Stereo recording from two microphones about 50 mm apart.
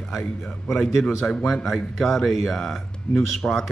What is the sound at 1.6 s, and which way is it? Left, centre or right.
Speech, centre.